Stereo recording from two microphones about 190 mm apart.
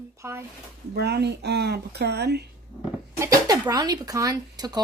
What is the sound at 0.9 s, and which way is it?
Speech, 60° right (ahead or behind).